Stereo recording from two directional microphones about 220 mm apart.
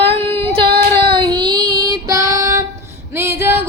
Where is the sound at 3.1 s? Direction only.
10° right (ahead or behind).